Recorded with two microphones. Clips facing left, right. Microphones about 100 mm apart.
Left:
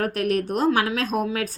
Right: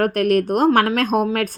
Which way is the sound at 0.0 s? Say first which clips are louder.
Right 6 dB; 55° right (ahead or behind).